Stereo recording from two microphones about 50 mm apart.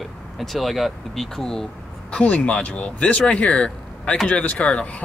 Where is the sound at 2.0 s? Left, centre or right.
Left.